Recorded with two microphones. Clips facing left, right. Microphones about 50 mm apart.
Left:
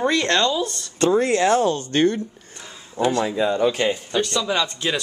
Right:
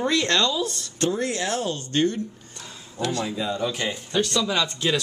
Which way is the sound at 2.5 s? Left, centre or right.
Centre.